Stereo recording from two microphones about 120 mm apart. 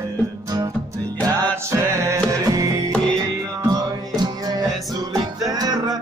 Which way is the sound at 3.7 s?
35° right (ahead or behind).